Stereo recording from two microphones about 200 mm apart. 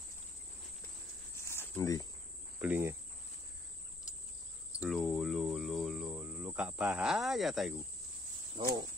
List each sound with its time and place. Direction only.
1.3 s cricket: 15° left (ahead or behind)
2.6 s cricket: 10° right (ahead or behind)
4.7 s cricket: centre (ahead or behind)
8.5 s speech: 20° right (ahead or behind)